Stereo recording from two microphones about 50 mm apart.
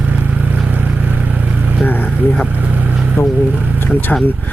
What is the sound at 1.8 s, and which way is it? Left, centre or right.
Vehicle, left.